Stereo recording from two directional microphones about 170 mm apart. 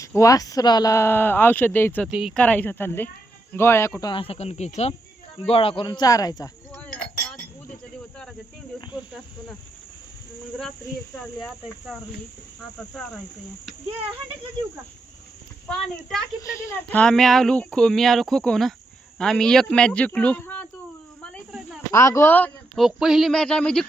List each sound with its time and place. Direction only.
0.2 s speech: 20° left (ahead or behind)
2.0 s speech: 5° right (ahead or behind); by 4.1 s 15° left (ahead or behind)
4.1 s speech: 35° left (ahead or behind)
6.7 s chink: 5° left (ahead or behind)
11.3 s speech: centre (ahead or behind)
15.6 s speech: 5° left (ahead or behind)
16.4 s speech: 15° left (ahead or behind)
21.2 s cricket: 5° right (ahead or behind)
21.9 s speech: 15° left (ahead or behind)
22.8 s speech: 5° right (ahead or behind)